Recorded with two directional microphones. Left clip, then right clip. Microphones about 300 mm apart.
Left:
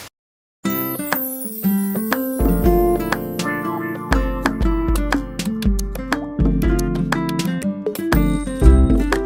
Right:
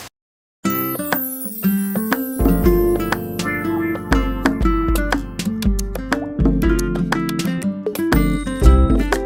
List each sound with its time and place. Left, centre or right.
0.6 s music: centre